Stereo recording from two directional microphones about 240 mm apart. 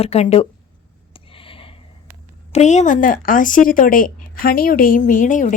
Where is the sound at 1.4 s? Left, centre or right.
Left.